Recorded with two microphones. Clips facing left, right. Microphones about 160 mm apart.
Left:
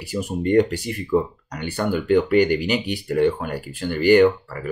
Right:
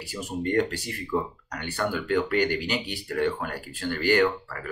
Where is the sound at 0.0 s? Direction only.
15° left (ahead or behind).